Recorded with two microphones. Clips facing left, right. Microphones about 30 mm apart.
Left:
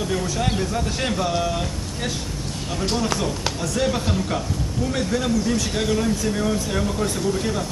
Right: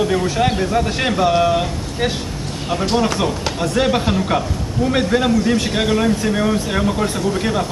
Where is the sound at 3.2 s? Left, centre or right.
Right.